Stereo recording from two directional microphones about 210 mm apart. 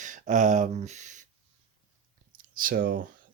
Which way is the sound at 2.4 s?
40° right (ahead or behind).